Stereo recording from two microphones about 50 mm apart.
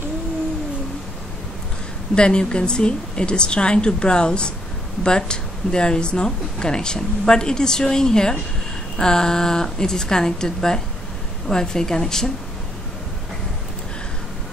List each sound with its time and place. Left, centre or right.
2.1 s a woman's voice: centre